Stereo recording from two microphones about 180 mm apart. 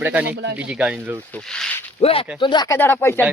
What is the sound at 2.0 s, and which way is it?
Speech, 30° left (ahead or behind).